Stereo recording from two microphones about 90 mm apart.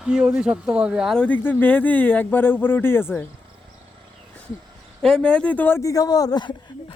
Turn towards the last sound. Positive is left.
turn(degrees=45)  # may be behind; listen again after turning